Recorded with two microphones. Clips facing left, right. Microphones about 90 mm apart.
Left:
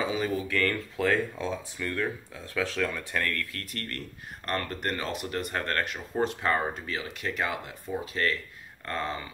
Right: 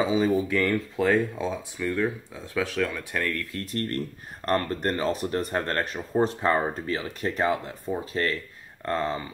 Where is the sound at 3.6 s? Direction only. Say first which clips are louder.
Right 9 dB; 30° right (ahead or behind).